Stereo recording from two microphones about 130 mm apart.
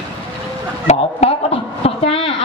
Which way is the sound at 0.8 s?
50° left (ahead or behind).